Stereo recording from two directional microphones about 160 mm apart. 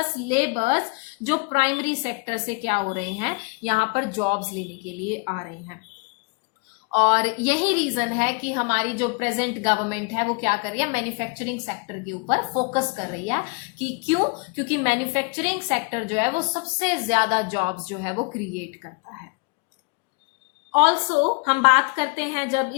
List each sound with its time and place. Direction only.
0.3 s a woman's voice: 50° right (ahead or behind)
6.9 s a woman's voice: 40° right (ahead or behind)
20.7 s a woman's voice: 45° right (ahead or behind)